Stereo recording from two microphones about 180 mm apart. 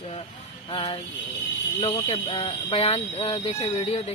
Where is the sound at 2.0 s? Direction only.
30° left (ahead or behind).